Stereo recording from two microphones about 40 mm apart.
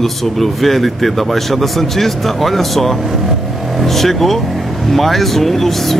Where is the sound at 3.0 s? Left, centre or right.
Centre.